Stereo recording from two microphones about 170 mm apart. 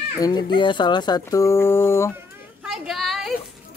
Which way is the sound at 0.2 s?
25° left (ahead or behind).